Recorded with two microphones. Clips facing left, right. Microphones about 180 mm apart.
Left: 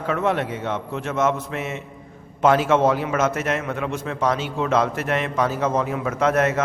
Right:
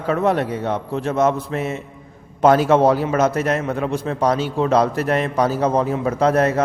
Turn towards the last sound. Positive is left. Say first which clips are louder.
# right 3 dB
turn(degrees=-35)  # may be behind; listen again after turning